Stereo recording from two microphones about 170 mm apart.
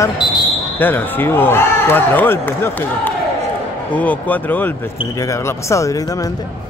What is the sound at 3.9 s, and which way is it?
Speech, 10° left (ahead or behind).